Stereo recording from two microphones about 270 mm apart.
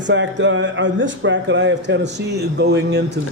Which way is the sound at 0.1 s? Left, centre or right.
Right.